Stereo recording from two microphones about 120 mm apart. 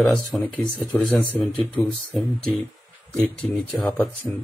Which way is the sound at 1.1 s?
15° left (ahead or behind).